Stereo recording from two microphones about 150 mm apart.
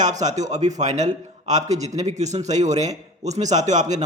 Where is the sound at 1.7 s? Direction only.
50° right (ahead or behind).